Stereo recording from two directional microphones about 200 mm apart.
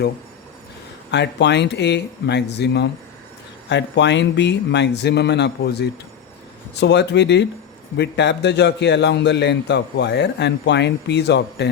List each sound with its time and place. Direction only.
1.1 s a man's voice: 60° left (ahead or behind)